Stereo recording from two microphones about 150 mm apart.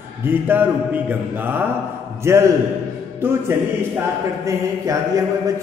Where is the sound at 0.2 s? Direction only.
15° right (ahead or behind).